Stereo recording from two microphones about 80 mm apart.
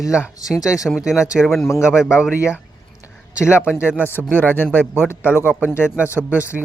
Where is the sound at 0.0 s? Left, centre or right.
Centre.